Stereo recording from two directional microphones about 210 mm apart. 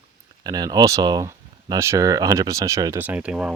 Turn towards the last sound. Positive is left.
turn(degrees=-5)  # may be behind; listen again after turning